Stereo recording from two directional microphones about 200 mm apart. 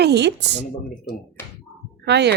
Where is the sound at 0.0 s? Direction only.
55° right (ahead or behind).